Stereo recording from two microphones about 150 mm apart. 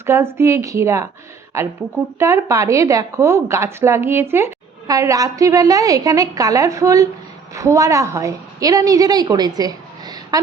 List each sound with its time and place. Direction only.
0.0 s a woman's voice: 15° right (ahead or behind)